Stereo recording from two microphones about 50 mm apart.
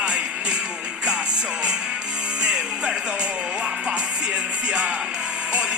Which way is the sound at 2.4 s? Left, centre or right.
Centre.